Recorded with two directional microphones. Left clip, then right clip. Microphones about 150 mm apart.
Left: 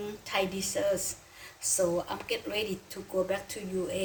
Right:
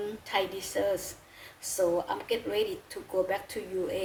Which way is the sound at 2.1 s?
30° right (ahead or behind).